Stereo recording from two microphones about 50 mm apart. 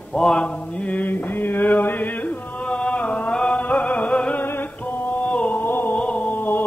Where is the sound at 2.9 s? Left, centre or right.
Left.